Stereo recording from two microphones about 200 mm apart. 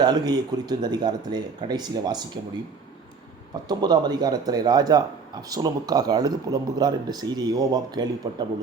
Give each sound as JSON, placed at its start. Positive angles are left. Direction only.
{"t": 0.0, "sound": "speech", "side_deg": -20}
{"t": 3.5, "sound": "speech", "side_deg": -20}